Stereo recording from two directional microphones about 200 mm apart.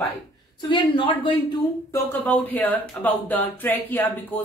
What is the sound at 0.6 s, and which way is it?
A woman's voice, 25° left (ahead or behind).